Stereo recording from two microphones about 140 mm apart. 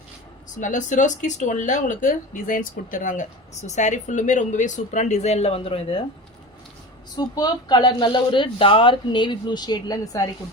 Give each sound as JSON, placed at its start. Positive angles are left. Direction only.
{"t": 0.6, "sound": "speech", "side_deg": 65}
{"t": 7.2, "sound": "speech", "side_deg": 30}